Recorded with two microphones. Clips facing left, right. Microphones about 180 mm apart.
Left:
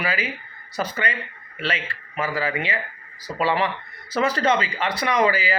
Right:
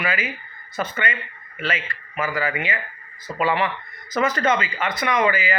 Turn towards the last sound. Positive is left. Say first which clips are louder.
# even
turn(degrees=35)  # may be behind; listen again after turning